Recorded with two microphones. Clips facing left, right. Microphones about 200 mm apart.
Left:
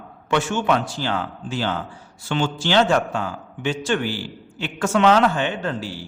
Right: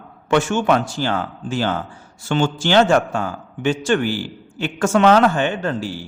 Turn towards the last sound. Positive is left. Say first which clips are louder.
# right 3 dB
turn(degrees=-45)  # may be behind; listen again after turning